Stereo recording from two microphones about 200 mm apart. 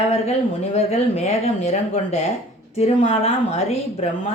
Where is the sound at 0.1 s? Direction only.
30° left (ahead or behind).